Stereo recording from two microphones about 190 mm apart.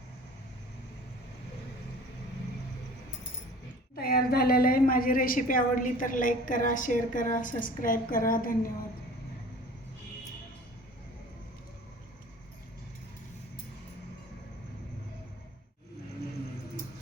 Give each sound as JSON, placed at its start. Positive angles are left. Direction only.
{"t": 3.9, "sound": "a woman's voice", "side_deg": 55}